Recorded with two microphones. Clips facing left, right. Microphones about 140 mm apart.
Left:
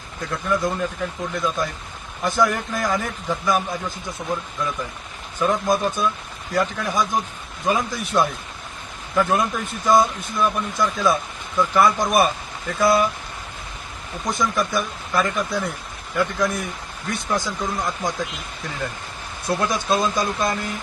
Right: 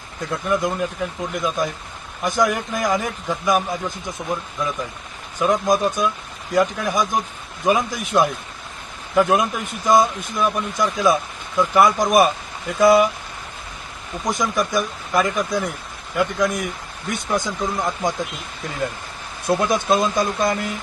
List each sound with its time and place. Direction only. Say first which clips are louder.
0.4 s a man's voice: right 1 dB; 20° right (ahead or behind)
4.2 s speech: right 1 dB; centre (ahead or behind)
5.4 s a man's voice: right 2 dB; 15° right (ahead or behind)
14.3 s a man's voice: right 1 dB; 15° right (ahead or behind)
19.5 s speech: right 3 dB; 20° right (ahead or behind)